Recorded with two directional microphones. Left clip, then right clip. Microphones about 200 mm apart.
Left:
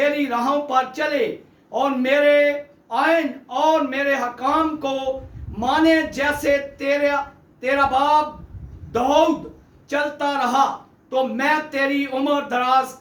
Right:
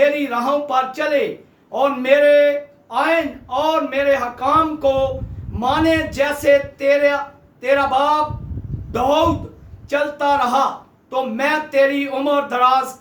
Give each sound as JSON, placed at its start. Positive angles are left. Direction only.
{"t": 0.0, "sound": "a man's voice", "side_deg": -15}